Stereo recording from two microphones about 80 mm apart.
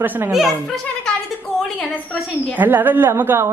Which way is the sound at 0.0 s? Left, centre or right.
Right.